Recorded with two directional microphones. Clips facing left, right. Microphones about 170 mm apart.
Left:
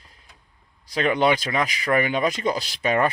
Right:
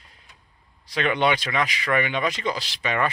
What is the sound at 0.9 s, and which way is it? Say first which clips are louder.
Speech: left 2 dB; 35° left (ahead or behind).